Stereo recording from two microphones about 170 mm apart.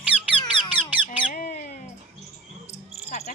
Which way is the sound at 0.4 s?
30° left (ahead or behind).